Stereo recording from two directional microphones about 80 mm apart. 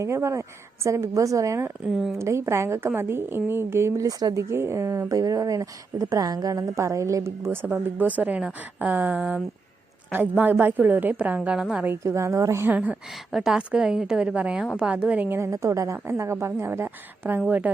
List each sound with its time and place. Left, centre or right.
0.0 s a woman's voice: right
1.9 s speech: centre
2.1 s a woman's voice: right
4.4 s a woman's voice: right
7.5 s a woman's voice: right; by 11.9 s centre
12.0 s a woman's voice: right
12.6 s a woman's voice: centre
13.3 s a woman's voice: centre
15.4 s a woman's voice: right